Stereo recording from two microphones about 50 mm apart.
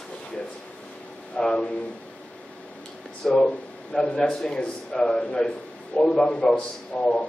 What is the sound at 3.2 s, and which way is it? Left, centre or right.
A man's voice, centre.